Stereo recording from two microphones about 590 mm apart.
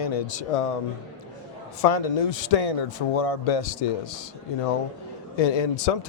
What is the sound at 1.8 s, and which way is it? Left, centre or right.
A man's voice, left.